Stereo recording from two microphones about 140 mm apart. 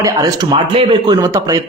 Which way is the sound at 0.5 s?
40° right (ahead or behind).